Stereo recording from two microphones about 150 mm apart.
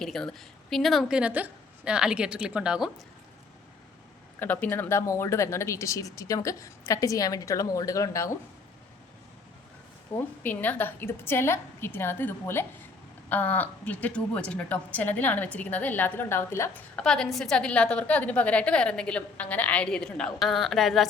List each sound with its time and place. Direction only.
0.0 s a woman's voice: 5° left (ahead or behind)
4.4 s speech: 10° left (ahead or behind)
10.2 s a woman's voice: 10° left (ahead or behind)